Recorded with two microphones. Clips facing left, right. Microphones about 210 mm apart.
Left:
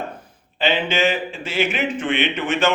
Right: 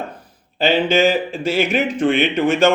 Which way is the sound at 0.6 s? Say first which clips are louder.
Right 5 dB; 35° right (ahead or behind).